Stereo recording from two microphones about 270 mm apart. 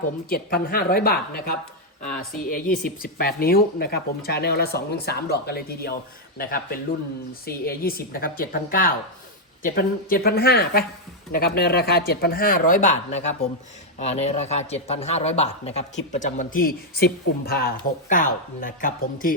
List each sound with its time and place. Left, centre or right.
0.3 s a man's voice: left